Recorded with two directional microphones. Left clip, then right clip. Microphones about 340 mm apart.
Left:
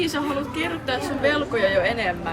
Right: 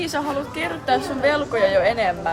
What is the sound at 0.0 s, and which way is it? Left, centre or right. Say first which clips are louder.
A woman's voice: right 1 dB; right.